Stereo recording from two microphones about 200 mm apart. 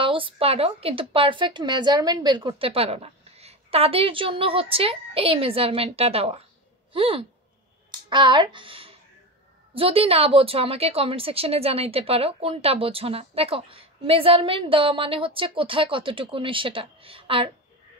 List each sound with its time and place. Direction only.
0.0 s a woman's voice: 25° right (ahead or behind)